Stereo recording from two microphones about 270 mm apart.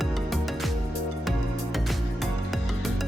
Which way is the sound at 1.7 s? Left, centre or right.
Centre.